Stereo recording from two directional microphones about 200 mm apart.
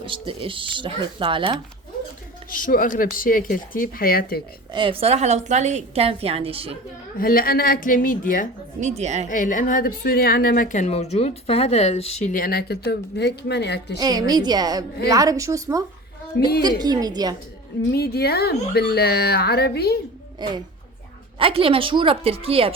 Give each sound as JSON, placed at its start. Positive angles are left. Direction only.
{"t": 0.0, "sound": "a woman's voice", "side_deg": -25}
{"t": 2.5, "sound": "speech", "side_deg": 45}
{"t": 4.7, "sound": "a woman's voice", "side_deg": -25}
{"t": 7.2, "sound": "speech", "side_deg": 45}
{"t": 8.8, "sound": "a woman's voice", "side_deg": -35}
{"t": 9.3, "sound": "speech", "side_deg": 40}
{"t": 14.0, "sound": "a woman's voice", "side_deg": -20}
{"t": 17.9, "sound": "speech", "side_deg": 55}
{"t": 20.4, "sound": "a woman's voice", "side_deg": -20}